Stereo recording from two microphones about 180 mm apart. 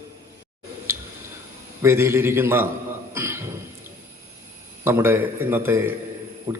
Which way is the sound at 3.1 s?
15° right (ahead or behind).